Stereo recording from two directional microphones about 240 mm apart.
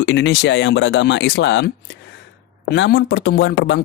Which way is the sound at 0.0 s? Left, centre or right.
Left.